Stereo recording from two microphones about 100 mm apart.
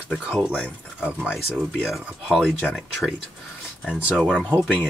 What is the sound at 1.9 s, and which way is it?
Speech, 5° left (ahead or behind).